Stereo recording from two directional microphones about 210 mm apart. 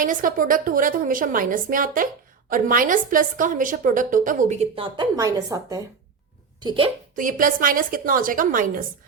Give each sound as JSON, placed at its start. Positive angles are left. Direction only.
{"t": 0.0, "sound": "a woman's voice", "side_deg": -40}
{"t": 7.2, "sound": "a woman's voice", "side_deg": -40}